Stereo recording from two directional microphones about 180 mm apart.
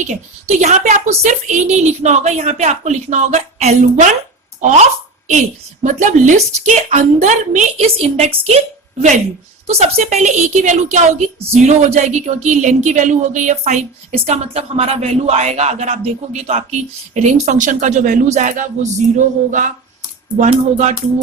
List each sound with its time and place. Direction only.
0.0 s a woman's voice: 40° right (ahead or behind)